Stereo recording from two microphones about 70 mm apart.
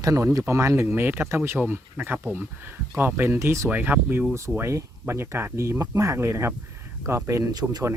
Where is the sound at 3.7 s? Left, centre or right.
Right.